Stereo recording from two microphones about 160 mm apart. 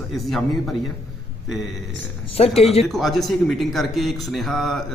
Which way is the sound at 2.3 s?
40° left (ahead or behind).